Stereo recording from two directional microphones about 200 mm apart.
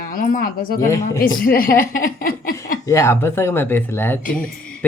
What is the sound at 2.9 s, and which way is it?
Speech, 15° left (ahead or behind).